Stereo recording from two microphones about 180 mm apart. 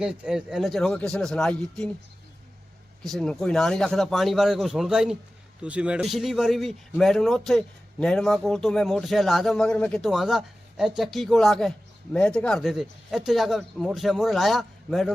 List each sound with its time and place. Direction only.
0.0 s a man's voice: 5° right (ahead or behind)
3.0 s a man's voice: centre (ahead or behind)